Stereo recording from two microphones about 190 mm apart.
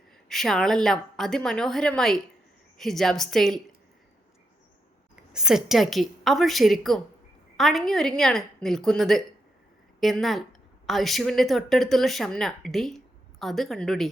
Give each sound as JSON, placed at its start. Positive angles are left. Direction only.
{"t": 0.3, "sound": "speech", "side_deg": 0}
{"t": 5.1, "sound": "speech", "side_deg": -5}